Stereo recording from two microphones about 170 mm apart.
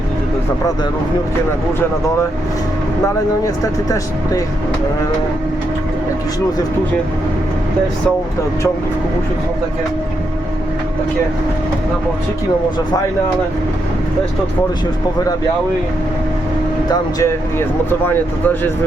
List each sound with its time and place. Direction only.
3.4 s speech: 20° left (ahead or behind)
18.0 s speech: 10° left (ahead or behind)